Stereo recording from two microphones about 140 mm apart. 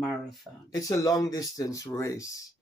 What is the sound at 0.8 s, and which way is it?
Speech, 25° left (ahead or behind).